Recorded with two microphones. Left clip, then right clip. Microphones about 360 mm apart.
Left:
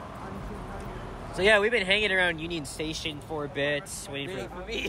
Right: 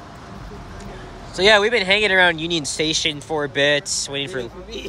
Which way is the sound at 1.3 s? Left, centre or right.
Centre.